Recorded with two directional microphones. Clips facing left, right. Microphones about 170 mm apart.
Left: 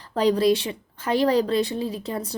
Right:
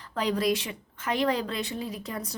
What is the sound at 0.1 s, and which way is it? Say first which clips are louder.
A woman's voice: left 7 dB; 35° left (ahead or behind).